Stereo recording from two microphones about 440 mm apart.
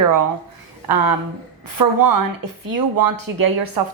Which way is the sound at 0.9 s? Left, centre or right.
Right.